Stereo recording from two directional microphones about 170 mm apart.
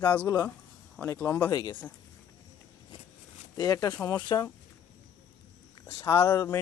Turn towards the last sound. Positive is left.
turn(degrees=15)  # may be behind; listen again after turning